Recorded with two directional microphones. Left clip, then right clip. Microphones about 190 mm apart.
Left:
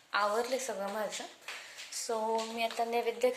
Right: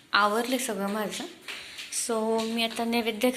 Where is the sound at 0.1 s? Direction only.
10° left (ahead or behind).